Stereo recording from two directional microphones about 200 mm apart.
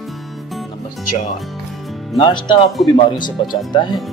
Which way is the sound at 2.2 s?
25° left (ahead or behind).